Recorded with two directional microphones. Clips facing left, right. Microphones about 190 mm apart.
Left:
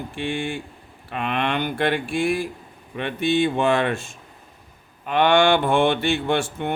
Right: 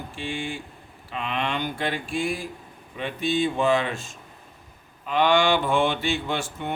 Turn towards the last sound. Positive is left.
turn(degrees=60)  # may be behind; listen again after turning